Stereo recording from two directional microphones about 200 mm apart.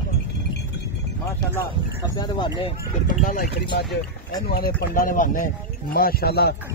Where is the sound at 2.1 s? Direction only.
25° left (ahead or behind).